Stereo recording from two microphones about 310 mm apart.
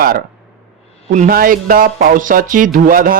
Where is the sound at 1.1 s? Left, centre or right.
Right.